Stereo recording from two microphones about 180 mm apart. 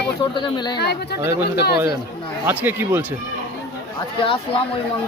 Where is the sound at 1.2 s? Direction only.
15° right (ahead or behind).